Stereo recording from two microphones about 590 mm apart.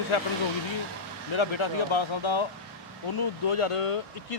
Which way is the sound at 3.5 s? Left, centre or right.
Left.